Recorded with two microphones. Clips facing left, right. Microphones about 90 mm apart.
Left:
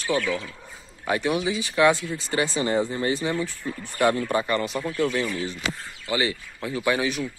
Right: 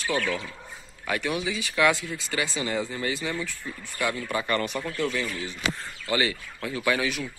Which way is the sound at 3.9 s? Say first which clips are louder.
Left 7 dB; 40° left (ahead or behind).